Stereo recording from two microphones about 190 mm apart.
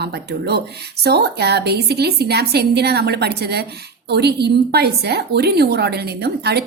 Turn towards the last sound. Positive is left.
turn(degrees=-60)  # may be behind; listen again after turning